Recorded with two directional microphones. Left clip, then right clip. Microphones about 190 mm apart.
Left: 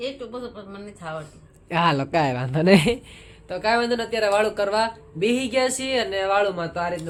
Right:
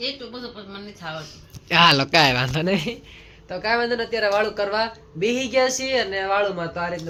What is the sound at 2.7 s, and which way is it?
Speech, 55° left (ahead or behind).